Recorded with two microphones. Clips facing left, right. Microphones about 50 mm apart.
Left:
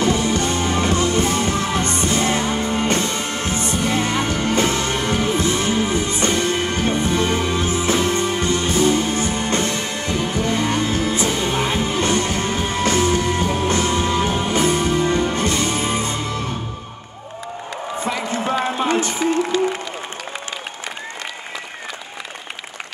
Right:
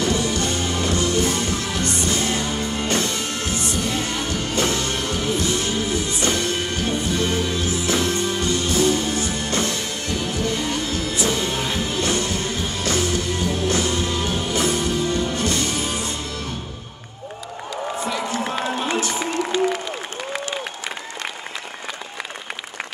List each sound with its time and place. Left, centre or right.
0.0 s music: left
18.0 s run: left